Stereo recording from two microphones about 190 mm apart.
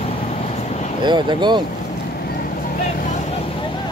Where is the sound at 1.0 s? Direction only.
25° right (ahead or behind).